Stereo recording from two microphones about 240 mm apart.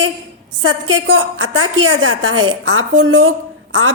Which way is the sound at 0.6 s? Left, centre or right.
Right.